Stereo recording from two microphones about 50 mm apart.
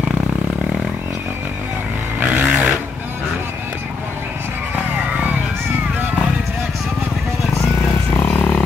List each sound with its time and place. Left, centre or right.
2.1 s vehicle: right
8.1 s vehicle: left
8.4 s vehicle: left